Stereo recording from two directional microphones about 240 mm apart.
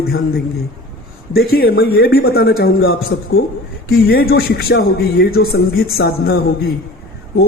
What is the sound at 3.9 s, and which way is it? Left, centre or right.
Speech, left.